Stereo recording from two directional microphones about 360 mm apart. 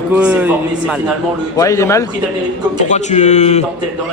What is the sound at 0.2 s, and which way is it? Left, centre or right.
Speech, centre.